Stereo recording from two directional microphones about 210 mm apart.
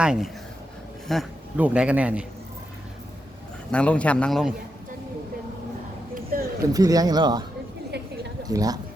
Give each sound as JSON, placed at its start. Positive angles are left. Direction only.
{"t": 0.0, "sound": "a man's voice", "side_deg": -5}
{"t": 3.7, "sound": "speech", "side_deg": 5}
{"t": 6.3, "sound": "a sound", "side_deg": -45}
{"t": 6.7, "sound": "speech", "side_deg": -15}
{"t": 7.9, "sound": "a sound", "side_deg": -50}
{"t": 8.4, "sound": "speech", "side_deg": -15}